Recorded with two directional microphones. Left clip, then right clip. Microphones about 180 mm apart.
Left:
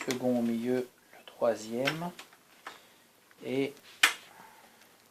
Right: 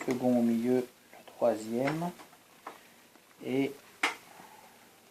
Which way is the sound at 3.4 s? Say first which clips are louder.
Even; 30° left (ahead or behind).